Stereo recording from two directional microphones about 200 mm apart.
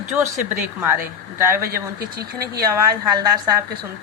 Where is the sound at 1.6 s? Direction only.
50° right (ahead or behind).